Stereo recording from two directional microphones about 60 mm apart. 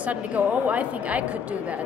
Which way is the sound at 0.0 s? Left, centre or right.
Right.